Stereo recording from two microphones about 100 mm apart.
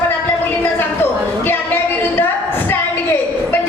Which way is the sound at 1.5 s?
20° left (ahead or behind).